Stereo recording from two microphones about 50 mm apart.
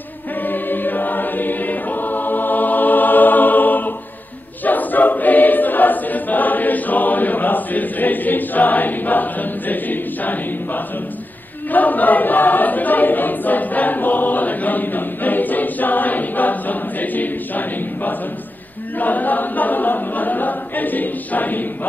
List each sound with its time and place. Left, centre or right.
0.4 s choir: left